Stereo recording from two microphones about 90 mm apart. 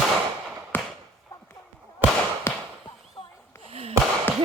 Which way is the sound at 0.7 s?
20° left (ahead or behind).